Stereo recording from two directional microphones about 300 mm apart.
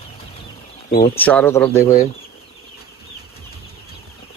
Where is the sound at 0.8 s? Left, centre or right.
Left.